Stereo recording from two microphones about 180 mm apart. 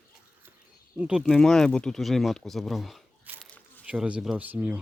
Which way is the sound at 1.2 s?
5° left (ahead or behind).